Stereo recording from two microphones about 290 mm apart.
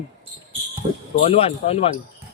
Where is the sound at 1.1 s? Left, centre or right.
Centre.